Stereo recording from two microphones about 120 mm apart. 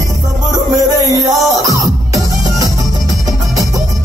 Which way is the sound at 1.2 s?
30° right (ahead or behind).